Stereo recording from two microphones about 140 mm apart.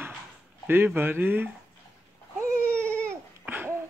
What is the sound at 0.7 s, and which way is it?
Speech, 15° right (ahead or behind).